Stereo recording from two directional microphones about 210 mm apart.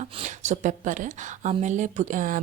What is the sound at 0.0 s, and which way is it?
Speech, 35° right (ahead or behind).